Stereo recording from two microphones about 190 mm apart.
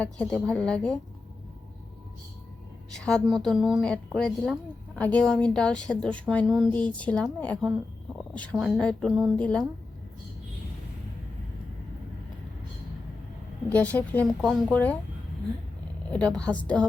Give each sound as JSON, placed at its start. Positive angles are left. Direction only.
{"t": 0.0, "sound": "a woman's voice", "side_deg": 5}
{"t": 2.9, "sound": "a woman's voice", "side_deg": 5}
{"t": 13.7, "sound": "a woman's voice", "side_deg": 10}
{"t": 16.0, "sound": "a woman's voice", "side_deg": 5}